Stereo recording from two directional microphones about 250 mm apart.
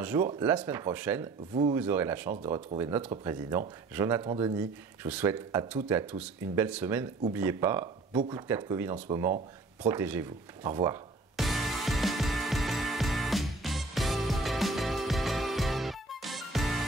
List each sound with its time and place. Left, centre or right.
0.0 s speech: centre
1.5 s speech: right
1.8 s speech: centre
11.3 s music: centre